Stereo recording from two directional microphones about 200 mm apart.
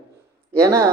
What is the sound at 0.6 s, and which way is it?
Speech, 15° right (ahead or behind).